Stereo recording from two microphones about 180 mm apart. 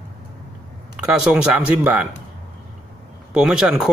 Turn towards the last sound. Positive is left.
turn(degrees=-5)  # may be behind; listen again after turning